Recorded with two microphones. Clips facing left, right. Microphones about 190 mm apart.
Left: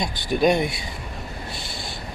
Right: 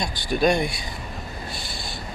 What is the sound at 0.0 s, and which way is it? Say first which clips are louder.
Speech: left 1 dB; 20° left (ahead or behind).